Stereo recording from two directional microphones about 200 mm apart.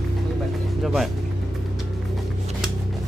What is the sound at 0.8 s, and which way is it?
Speech, centre (ahead or behind).